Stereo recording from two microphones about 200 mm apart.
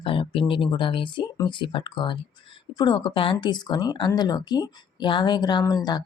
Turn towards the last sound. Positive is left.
turn(degrees=20)  # may be behind; listen again after turning